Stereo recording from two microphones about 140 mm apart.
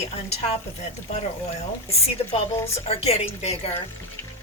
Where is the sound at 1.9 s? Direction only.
45° left (ahead or behind).